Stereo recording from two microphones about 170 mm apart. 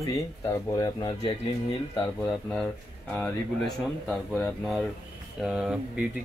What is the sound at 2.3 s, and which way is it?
Speech, 5° left (ahead or behind).